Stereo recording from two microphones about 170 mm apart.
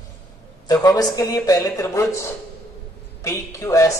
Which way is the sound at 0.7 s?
20° left (ahead or behind).